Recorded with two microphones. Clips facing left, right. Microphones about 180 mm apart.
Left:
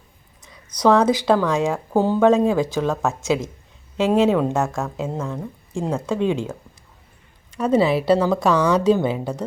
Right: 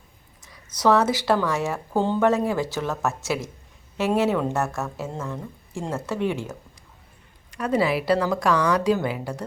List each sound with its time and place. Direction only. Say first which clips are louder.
0.8 s speech: left 4 dB; 15° left (ahead or behind)
7.5 s a woman's voice: left 5 dB; 25° left (ahead or behind)